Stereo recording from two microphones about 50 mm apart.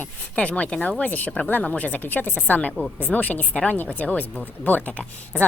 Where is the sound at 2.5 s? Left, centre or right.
Left.